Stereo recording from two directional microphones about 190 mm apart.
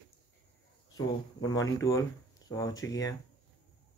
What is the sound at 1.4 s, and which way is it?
Speech, 20° left (ahead or behind).